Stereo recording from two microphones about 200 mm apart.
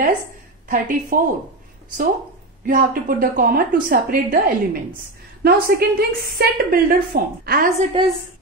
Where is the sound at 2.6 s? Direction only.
45° right (ahead or behind).